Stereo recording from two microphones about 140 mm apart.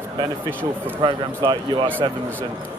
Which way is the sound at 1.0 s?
35° right (ahead or behind).